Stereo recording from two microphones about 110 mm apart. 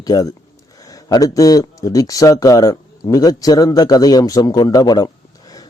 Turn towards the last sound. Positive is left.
turn(degrees=35)  # may be behind; listen again after turning